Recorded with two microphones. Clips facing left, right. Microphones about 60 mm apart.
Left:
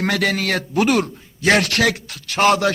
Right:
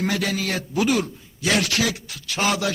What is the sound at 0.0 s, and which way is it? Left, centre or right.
A man's voice, left.